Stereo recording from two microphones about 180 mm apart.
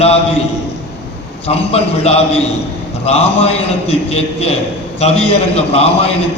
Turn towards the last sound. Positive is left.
turn(degrees=35)  # may be behind; listen again after turning